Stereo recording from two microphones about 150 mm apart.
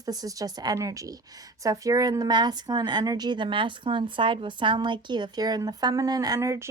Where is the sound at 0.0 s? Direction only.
25° right (ahead or behind).